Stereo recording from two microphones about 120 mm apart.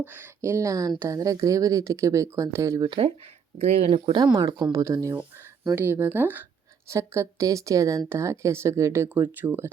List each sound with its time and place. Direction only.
0.0 s a woman's voice: 20° right (ahead or behind)
2.8 s speech: 45° right (ahead or behind)
3.6 s speech: 60° right (ahead or behind)
4.3 s a woman's voice: 35° right (ahead or behind); by 9.6 s 15° right (ahead or behind)